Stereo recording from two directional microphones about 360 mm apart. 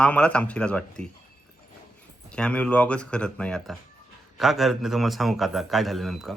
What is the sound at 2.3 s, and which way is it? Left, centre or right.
Speech, centre.